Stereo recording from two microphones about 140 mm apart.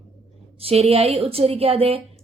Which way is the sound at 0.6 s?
45° right (ahead or behind).